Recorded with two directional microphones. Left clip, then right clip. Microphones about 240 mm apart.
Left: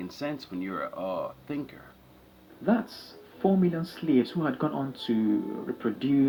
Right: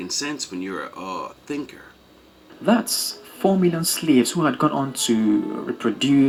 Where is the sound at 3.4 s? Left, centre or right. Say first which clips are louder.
Right 7 dB; right.